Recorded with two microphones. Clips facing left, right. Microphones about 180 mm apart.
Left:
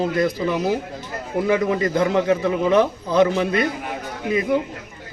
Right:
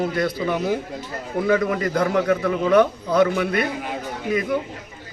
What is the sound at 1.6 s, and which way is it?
A man's voice, 20° left (ahead or behind).